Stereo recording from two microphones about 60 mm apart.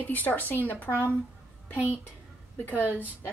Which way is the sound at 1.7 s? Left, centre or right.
Right.